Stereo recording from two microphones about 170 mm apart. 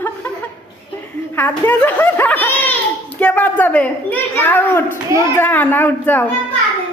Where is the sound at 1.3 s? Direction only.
10° left (ahead or behind).